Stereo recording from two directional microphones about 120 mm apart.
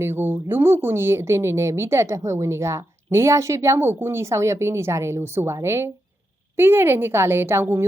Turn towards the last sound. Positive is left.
turn(degrees=-20)  # may be behind; listen again after turning